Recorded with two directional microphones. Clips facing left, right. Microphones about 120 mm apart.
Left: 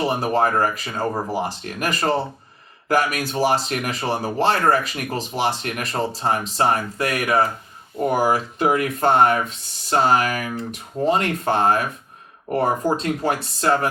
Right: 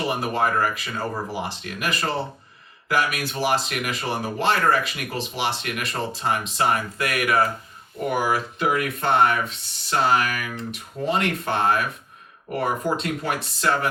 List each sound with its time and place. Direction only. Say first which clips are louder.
0.0 s speech: left 4 dB; 35° left (ahead or behind)